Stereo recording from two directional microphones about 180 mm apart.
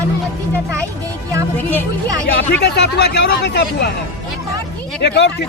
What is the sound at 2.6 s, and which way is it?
Speech, 70° left (ahead or behind).